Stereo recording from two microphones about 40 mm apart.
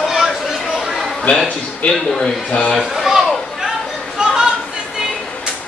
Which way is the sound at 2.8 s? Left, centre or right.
Centre.